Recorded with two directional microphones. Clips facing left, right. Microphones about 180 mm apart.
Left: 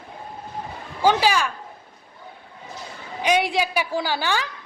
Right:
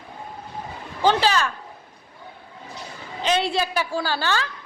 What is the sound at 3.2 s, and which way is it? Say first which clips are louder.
A woman's voice: left 1 dB; 15° left (ahead or behind).